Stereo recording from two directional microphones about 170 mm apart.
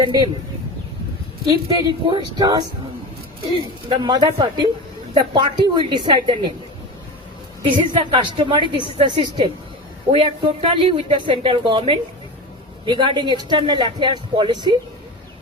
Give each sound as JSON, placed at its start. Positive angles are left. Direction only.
{"t": 0.0, "sound": "speech", "side_deg": -25}
{"t": 1.5, "sound": "speech", "side_deg": -25}
{"t": 7.6, "sound": "speech", "side_deg": -30}